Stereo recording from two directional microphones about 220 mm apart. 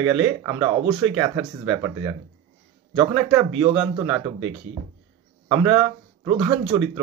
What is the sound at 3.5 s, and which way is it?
Speech, 25° right (ahead or behind).